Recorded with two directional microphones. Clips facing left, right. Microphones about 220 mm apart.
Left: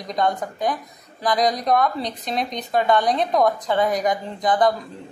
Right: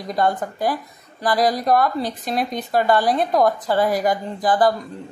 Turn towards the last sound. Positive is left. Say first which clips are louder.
# right 1 dB
turn(degrees=-5)  # may be behind; listen again after turning